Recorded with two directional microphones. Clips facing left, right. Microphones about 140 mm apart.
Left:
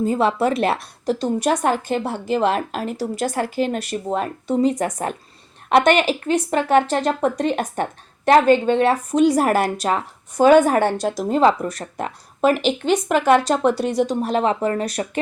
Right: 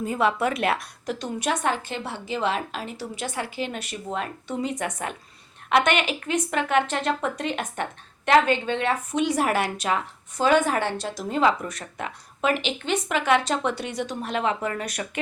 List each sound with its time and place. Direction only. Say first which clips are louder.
0.0 s speech: left 5 dB; 30° left (ahead or behind)